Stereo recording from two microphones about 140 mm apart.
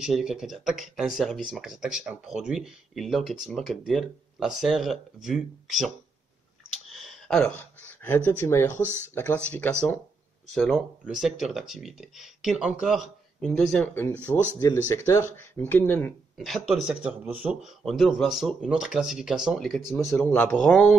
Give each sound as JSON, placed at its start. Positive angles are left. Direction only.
{"t": 0.0, "sound": "speech", "side_deg": -5}
{"t": 6.9, "sound": "a sound", "side_deg": 0}
{"t": 8.0, "sound": "speech", "side_deg": 15}
{"t": 10.5, "sound": "speech", "side_deg": 0}
{"t": 14.6, "sound": "speech", "side_deg": 20}
{"t": 16.3, "sound": "a man's voice", "side_deg": 0}
{"t": 17.8, "sound": "speech", "side_deg": 0}